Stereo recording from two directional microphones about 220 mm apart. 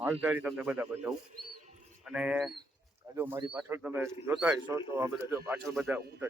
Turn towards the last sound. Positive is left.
turn(degrees=-10)  # may be behind; listen again after turning